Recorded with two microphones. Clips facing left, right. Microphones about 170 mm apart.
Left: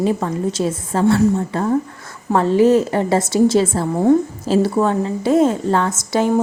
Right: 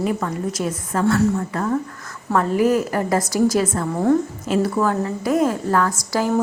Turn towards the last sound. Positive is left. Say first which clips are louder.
# left 3 dB
turn(degrees=25)  # may be behind; listen again after turning